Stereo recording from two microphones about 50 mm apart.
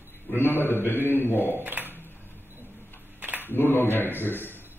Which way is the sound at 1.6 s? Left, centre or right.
Right.